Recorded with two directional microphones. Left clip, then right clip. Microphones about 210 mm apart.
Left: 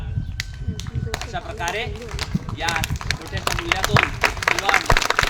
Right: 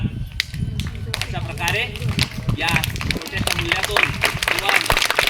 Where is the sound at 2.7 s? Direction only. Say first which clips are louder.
Right 2 dB; 50° left (ahead or behind).